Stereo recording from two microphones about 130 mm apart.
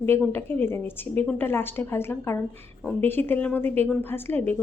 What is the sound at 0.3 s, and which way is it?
A woman's voice, 15° left (ahead or behind).